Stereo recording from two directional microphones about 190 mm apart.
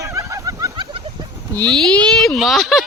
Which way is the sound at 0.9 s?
30° right (ahead or behind).